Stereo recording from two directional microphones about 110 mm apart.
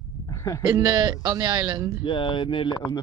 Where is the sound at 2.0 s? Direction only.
50° left (ahead or behind).